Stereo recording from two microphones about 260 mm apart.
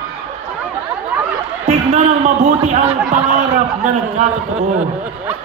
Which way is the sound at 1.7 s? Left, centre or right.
Right.